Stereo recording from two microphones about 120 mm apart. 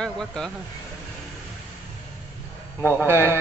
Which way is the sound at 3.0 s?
20° right (ahead or behind).